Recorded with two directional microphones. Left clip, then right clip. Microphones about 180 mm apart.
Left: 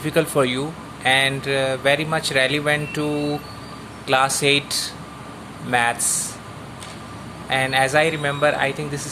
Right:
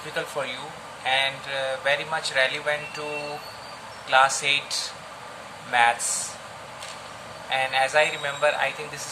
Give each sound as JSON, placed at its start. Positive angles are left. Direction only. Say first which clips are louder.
{"t": 0.1, "sound": "speech", "louder": "left 10 dB", "side_deg": 55}
{"t": 4.1, "sound": "speech", "louder": "left 2 dB", "side_deg": 50}
{"t": 7.5, "sound": "speech", "louder": "left 4 dB", "side_deg": 50}